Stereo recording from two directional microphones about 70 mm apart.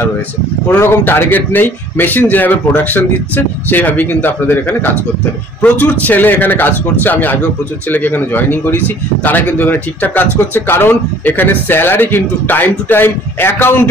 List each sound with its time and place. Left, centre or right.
0.7 s speech: left